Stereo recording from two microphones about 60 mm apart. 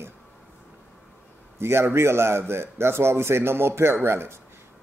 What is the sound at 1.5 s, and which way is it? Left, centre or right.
A man's voice, right.